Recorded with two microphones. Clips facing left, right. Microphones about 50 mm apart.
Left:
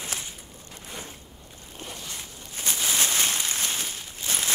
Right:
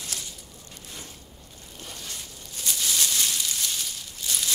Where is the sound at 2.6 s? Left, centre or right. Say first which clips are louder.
Left 2 dB; left.